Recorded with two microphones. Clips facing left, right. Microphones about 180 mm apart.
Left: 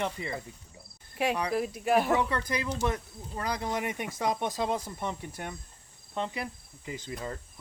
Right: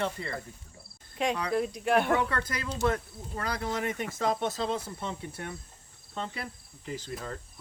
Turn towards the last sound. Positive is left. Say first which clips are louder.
# left 2 dB
turn(degrees=15)  # may be behind; listen again after turning